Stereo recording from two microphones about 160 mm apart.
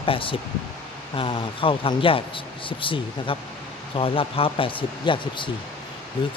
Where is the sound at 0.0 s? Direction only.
35° left (ahead or behind).